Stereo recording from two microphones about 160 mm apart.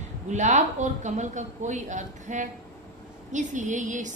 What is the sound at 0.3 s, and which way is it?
A woman's voice, 50° right (ahead or behind).